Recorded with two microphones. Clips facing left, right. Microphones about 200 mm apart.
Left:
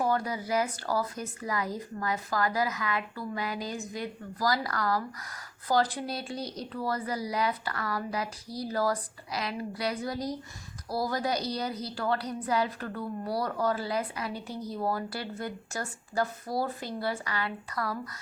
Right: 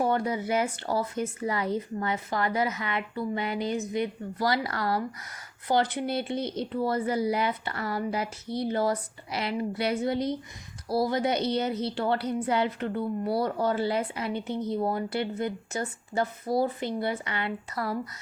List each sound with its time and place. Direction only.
0.0 s a woman's voice: 25° right (ahead or behind)